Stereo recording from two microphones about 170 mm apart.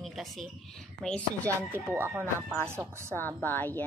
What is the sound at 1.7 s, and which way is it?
Speech, 15° right (ahead or behind).